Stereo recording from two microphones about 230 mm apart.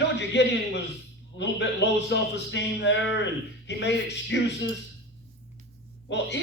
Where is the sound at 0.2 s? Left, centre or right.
Left.